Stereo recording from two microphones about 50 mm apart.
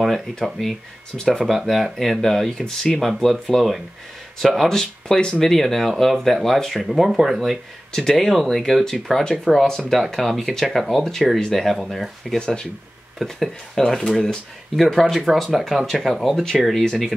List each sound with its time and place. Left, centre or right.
0.4 s speech: centre
7.9 s speech: centre
12.4 s speech: centre
13.2 s speech: centre